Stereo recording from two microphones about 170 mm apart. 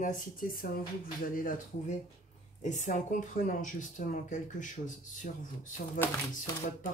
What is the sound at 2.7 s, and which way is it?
Speech, 45° left (ahead or behind).